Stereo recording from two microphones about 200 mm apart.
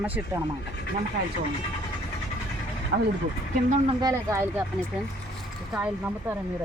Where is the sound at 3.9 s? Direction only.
20° right (ahead or behind).